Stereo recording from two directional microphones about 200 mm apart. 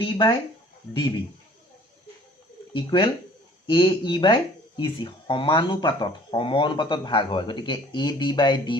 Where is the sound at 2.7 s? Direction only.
25° left (ahead or behind).